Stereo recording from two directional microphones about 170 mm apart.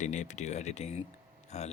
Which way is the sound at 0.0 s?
45° left (ahead or behind).